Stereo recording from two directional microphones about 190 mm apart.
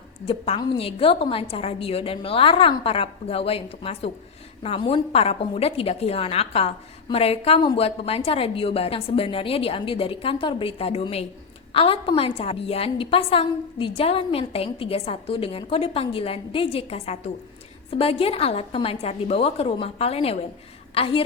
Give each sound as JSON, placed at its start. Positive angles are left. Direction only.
{"t": 0.3, "sound": "a woman's voice", "side_deg": 30}